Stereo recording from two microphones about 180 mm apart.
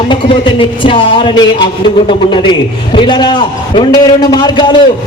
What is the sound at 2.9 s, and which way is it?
A man's voice, 25° left (ahead or behind).